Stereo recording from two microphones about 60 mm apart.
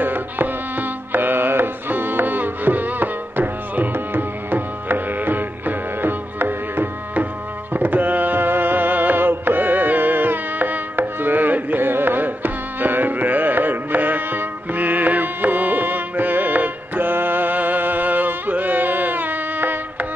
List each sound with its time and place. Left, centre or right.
0.0 s music: right